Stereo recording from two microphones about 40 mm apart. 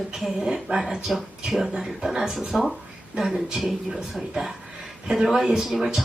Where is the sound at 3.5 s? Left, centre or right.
Centre.